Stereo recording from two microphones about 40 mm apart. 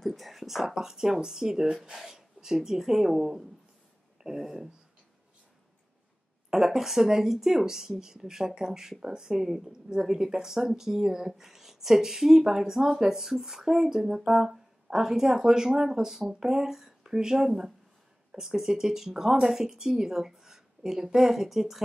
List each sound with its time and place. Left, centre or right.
0.0 s speech: centre
6.5 s speech: centre